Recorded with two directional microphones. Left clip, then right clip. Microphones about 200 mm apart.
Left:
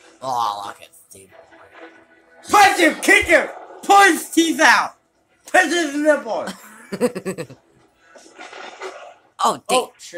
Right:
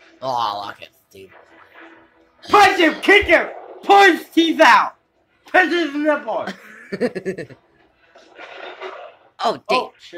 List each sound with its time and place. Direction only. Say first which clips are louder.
0.2 s speech: even; 5° right (ahead or behind)
2.8 s speech: right 1 dB; 15° left (ahead or behind)
6.4 s speech: right 1 dB; 5° left (ahead or behind)
9.4 s speech: left 1 dB; 10° left (ahead or behind)